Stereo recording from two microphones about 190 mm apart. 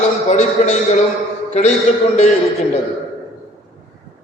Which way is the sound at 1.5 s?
35° left (ahead or behind).